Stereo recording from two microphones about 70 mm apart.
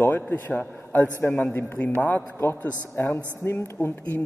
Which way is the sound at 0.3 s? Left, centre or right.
Left.